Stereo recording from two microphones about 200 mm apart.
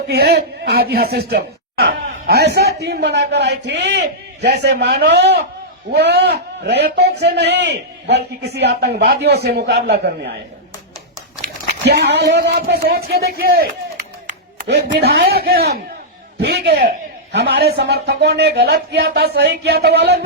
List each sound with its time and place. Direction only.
0.1 s a man's voice: 50° right (ahead or behind)
11.9 s a man's voice: 55° right (ahead or behind)